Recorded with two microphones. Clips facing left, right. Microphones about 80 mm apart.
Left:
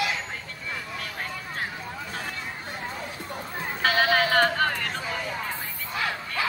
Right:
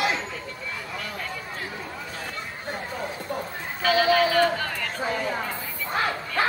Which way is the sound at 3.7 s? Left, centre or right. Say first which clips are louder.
Right 2 dB; left.